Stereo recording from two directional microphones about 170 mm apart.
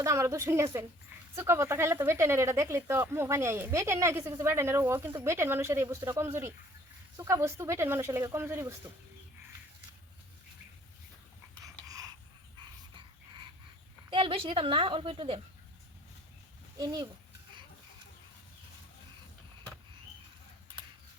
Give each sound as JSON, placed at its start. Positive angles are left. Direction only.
{"t": 0.0, "sound": "speech", "side_deg": -15}
{"t": 11.6, "sound": "a sound", "side_deg": -20}
{"t": 14.1, "sound": "a woman's voice", "side_deg": -30}
{"t": 16.8, "sound": "a child's voice", "side_deg": -25}